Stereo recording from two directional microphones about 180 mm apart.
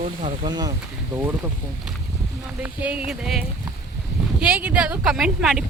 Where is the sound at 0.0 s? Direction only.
35° right (ahead or behind).